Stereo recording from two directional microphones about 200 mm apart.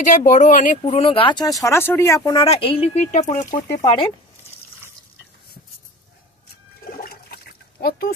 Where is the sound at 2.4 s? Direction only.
30° left (ahead or behind).